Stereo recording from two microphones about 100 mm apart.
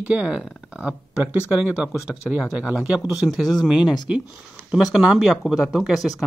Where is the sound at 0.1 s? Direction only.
10° right (ahead or behind).